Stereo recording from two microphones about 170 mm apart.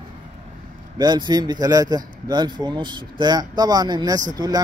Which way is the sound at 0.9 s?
25° right (ahead or behind).